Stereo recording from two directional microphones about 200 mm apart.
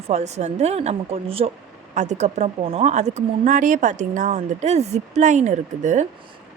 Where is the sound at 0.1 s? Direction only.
35° right (ahead or behind).